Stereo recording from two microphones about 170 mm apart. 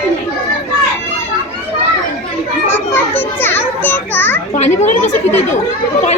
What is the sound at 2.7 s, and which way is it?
Children playing, 10° left (ahead or behind).